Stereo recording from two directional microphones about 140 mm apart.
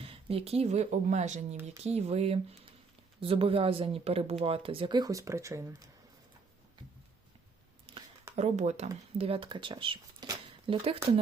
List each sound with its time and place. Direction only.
0.0 s speech: 40° right (ahead or behind); by 5.7 s 20° right (ahead or behind)
7.9 s a sound: 40° right (ahead or behind)
8.4 s speech: 55° right (ahead or behind); by 10.8 s 35° right (ahead or behind)